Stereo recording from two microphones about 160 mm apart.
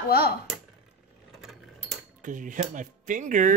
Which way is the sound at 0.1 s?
75° left (ahead or behind).